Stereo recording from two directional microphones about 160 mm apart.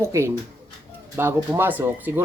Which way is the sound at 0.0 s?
15° right (ahead or behind).